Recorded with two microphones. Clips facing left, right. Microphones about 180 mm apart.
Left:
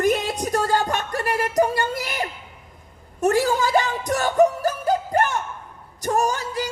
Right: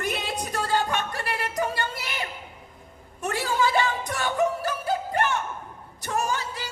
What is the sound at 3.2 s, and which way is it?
Music, 45° left (ahead or behind).